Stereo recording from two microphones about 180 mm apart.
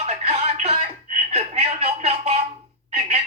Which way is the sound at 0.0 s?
35° right (ahead or behind).